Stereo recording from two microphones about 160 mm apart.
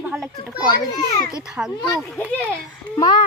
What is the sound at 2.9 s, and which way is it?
Speech, 30° left (ahead or behind).